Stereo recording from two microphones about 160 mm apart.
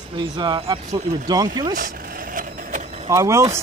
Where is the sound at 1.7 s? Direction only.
60° right (ahead or behind).